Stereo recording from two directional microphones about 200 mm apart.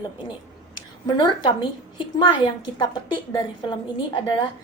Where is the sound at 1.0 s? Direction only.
20° left (ahead or behind).